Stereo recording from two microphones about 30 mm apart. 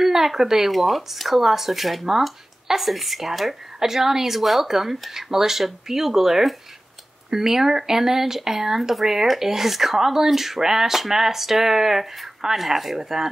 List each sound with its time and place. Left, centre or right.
0.0 s speech: centre
0.7 s speech: centre
2.0 s speech: centre
9.0 s speech: centre